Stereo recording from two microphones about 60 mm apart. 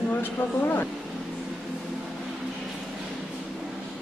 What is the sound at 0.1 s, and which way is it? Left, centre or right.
Speech, left.